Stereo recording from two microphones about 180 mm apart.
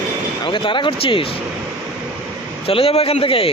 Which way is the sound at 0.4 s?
25° left (ahead or behind).